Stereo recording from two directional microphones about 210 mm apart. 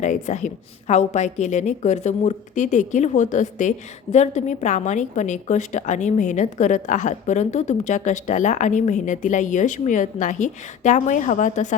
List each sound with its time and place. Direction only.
0.0 s a woman's voice: 35° left (ahead or behind)